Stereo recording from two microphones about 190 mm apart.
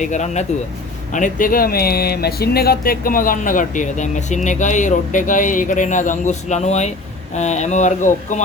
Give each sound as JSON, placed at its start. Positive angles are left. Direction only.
{"t": 0.0, "sound": "speech", "side_deg": 40}